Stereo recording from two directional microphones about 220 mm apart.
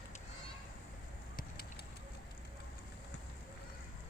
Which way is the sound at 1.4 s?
45° left (ahead or behind).